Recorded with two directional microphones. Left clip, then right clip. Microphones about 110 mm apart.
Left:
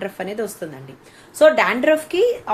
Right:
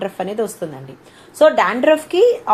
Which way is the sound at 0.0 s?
30° right (ahead or behind).